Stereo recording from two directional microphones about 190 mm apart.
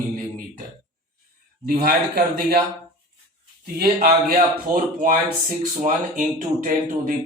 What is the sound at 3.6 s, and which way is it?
A man's voice, 55° right (ahead or behind).